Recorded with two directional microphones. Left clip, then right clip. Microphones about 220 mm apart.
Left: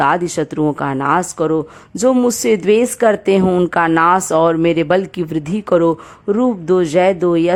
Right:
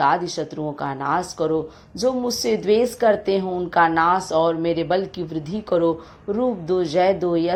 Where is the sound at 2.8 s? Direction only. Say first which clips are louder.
Left 4 dB; 35° left (ahead or behind).